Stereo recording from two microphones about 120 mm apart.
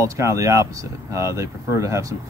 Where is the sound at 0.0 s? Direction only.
25° right (ahead or behind).